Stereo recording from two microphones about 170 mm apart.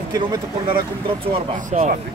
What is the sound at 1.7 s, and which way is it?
Speech, 45° right (ahead or behind).